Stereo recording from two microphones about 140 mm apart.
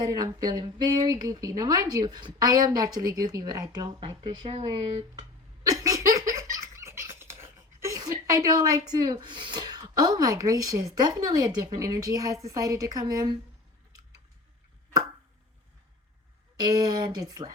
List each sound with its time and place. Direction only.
0.0 s speech: 25° right (ahead or behind)
5.7 s laughter: 25° right (ahead or behind)
8.9 s speech: 30° right (ahead or behind)
16.6 s speech: 30° right (ahead or behind)